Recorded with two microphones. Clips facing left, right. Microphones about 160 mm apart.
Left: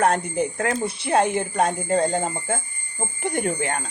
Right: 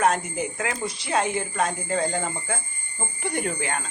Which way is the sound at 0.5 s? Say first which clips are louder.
Left 5 dB; 45° left (ahead or behind).